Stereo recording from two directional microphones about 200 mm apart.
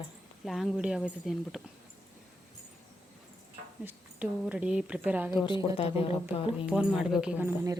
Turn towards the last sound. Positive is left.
turn(degrees=-15)  # may be behind; listen again after turning